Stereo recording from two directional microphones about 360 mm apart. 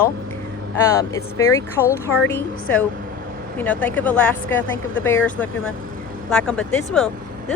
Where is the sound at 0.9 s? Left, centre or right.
Centre.